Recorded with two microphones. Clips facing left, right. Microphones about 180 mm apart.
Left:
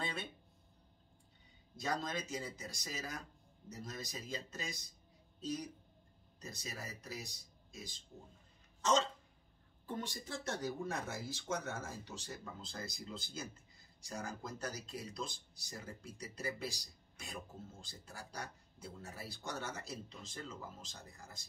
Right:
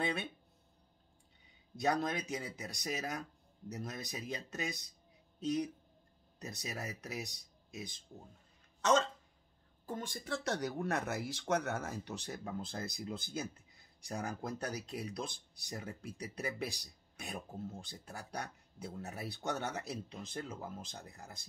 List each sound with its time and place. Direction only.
0.0 s a sound: 70° right (ahead or behind)
1.8 s speech: 65° right (ahead or behind)
8.8 s speech: 55° right (ahead or behind)
10.2 s speech: 70° right (ahead or behind)